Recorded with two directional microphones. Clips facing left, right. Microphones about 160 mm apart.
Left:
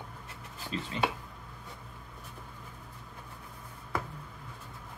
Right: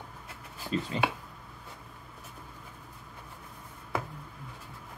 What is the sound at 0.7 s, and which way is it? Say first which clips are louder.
Speech: right 6 dB; 40° right (ahead or behind).